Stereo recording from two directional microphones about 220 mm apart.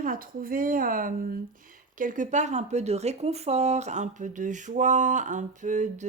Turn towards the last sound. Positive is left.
turn(degrees=-35)  # may be behind; listen again after turning